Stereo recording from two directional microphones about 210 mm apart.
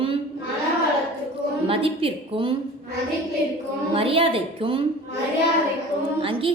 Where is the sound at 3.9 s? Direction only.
25° right (ahead or behind).